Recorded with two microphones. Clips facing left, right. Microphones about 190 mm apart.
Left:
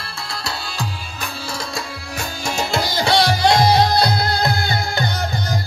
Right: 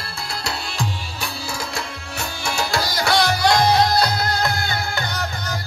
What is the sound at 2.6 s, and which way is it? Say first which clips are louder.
Music: left 3 dB; 25° left (ahead or behind).